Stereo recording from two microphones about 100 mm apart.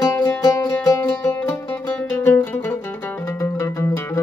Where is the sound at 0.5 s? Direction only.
30° left (ahead or behind).